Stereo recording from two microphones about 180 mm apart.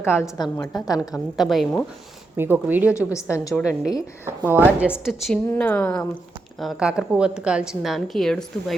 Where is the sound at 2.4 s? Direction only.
10° right (ahead or behind).